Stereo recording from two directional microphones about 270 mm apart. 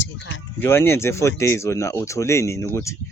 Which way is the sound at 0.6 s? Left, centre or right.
Centre.